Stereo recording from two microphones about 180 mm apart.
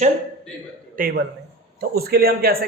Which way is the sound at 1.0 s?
55° right (ahead or behind).